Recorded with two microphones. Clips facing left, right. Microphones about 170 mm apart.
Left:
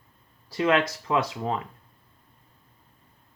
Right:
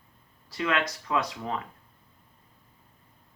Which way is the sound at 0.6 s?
30° left (ahead or behind).